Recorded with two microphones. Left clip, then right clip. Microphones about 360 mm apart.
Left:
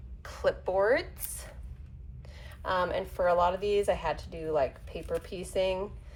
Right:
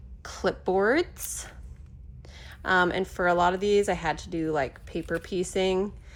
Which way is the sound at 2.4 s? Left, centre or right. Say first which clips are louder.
Right 6 dB; centre.